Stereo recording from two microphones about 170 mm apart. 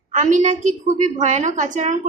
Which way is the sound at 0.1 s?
45° right (ahead or behind).